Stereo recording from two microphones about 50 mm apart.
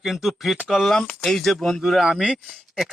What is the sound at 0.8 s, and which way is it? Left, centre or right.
Speech, centre.